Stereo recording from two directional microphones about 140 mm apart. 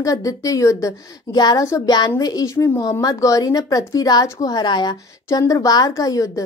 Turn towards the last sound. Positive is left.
turn(degrees=25)  # may be behind; listen again after turning